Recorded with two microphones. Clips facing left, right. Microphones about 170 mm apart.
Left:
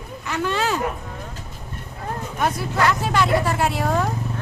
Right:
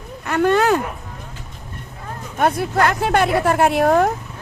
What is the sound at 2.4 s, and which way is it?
Speech, 55° right (ahead or behind).